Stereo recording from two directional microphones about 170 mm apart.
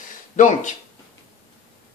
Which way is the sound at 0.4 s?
45° left (ahead or behind).